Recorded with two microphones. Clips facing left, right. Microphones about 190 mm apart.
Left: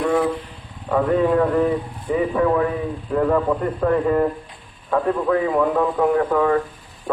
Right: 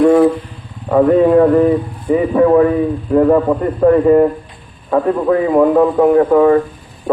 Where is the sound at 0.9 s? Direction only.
40° right (ahead or behind).